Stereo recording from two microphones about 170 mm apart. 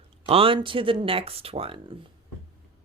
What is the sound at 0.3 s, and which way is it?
Speech, 35° right (ahead or behind).